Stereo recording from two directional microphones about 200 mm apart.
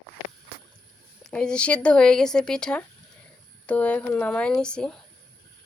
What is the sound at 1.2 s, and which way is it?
Speech, 5° left (ahead or behind).